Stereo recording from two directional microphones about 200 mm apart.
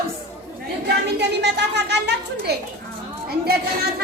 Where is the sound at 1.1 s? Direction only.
60° right (ahead or behind).